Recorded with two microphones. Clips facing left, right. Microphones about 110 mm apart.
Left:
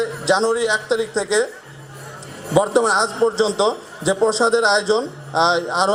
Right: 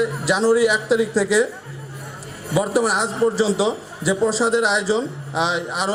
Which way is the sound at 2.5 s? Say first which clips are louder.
Left 3 dB; 25° left (ahead or behind).